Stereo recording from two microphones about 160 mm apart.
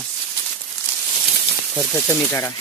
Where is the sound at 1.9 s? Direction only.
15° left (ahead or behind).